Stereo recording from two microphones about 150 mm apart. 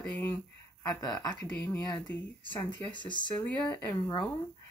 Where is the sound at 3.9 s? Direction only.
25° left (ahead or behind).